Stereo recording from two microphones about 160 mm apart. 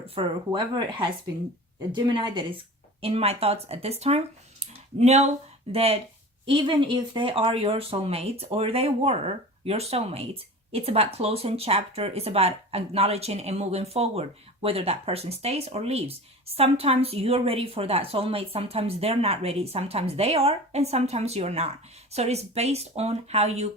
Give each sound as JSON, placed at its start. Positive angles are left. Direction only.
{"t": 0.1, "sound": "speech", "side_deg": -35}
{"t": 4.6, "sound": "a sound", "side_deg": -45}
{"t": 5.7, "sound": "speech", "side_deg": -40}